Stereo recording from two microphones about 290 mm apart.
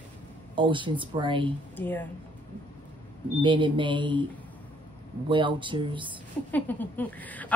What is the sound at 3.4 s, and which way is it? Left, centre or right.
Speech, centre.